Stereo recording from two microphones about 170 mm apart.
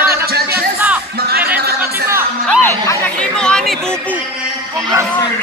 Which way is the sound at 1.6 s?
65° right (ahead or behind).